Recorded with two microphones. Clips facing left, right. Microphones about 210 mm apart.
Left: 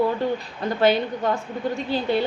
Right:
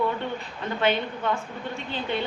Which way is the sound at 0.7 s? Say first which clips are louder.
Left 5 dB; 40° left (ahead or behind).